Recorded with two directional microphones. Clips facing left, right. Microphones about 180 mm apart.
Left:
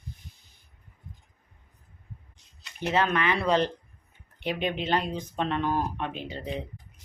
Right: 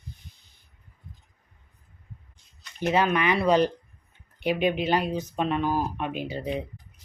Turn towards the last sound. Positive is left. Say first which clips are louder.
# right 4 dB
turn(degrees=-10)  # may be behind; listen again after turning